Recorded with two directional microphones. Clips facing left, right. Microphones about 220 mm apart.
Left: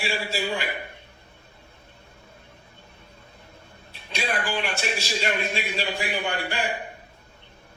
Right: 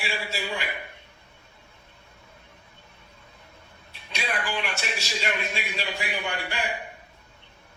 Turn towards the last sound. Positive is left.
turn(degrees=30)  # may be behind; listen again after turning